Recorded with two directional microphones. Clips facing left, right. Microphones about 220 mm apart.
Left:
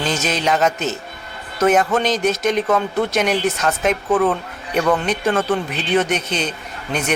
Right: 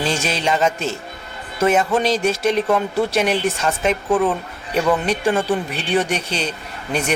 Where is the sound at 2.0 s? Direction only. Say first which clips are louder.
Even; 30° right (ahead or behind).